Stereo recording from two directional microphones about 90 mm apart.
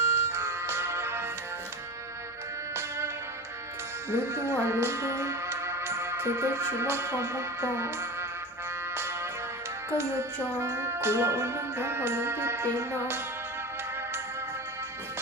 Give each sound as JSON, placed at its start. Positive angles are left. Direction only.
{"t": 0.0, "sound": "music", "side_deg": -30}
{"t": 4.1, "sound": "speech", "side_deg": -30}
{"t": 10.6, "sound": "music", "side_deg": -30}